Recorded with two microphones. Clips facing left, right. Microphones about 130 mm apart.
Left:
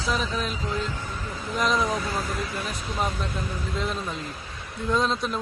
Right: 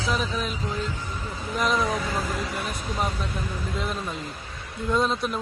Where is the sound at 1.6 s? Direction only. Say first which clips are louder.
Even; centre (ahead or behind).